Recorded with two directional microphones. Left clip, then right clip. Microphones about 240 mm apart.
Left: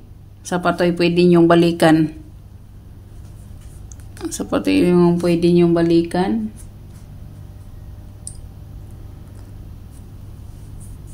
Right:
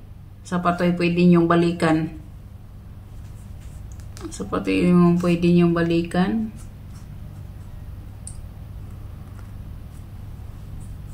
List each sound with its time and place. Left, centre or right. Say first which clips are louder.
0.5 s speech: left 4 dB; left
4.2 s speech: left 6 dB; left